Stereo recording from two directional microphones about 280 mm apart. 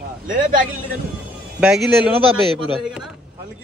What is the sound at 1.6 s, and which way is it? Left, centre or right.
Speech, centre.